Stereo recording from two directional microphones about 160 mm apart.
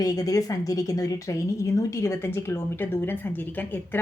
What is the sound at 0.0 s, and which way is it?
A woman's voice, 25° left (ahead or behind).